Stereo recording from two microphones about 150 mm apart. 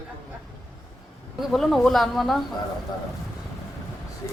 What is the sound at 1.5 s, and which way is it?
Speech, centre (ahead or behind).